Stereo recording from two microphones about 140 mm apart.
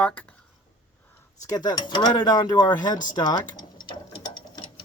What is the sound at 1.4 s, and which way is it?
Speech, 25° left (ahead or behind).